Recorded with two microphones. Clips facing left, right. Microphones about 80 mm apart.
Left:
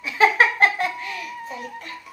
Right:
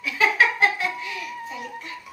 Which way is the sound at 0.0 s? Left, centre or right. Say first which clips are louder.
Left 3 dB; left.